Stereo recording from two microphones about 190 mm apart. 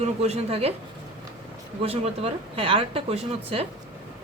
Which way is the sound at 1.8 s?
30° right (ahead or behind).